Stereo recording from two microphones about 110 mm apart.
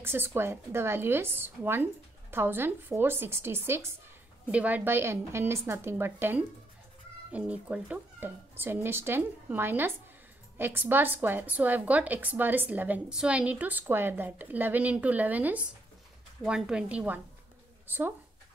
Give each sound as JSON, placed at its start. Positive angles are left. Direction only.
{"t": 0.0, "sound": "speech", "side_deg": -20}
{"t": 4.5, "sound": "a woman's voice", "side_deg": -10}